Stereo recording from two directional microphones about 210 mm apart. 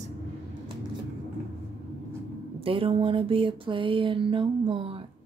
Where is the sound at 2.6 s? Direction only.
25° right (ahead or behind).